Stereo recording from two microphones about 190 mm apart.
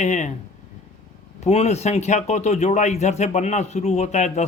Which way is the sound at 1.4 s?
35° left (ahead or behind).